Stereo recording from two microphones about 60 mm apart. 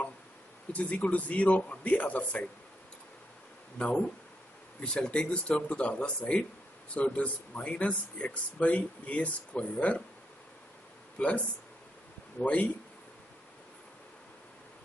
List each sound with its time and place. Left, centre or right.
0.7 s speech: left
3.7 s speech: centre
11.1 s speech: centre